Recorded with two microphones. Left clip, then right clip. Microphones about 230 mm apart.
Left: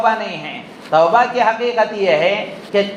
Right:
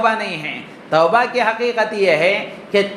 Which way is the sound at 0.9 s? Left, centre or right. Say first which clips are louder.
Left 2 dB; right.